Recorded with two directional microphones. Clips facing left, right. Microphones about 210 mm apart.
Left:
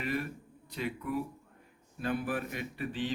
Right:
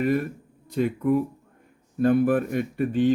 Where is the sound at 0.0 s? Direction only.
45° right (ahead or behind).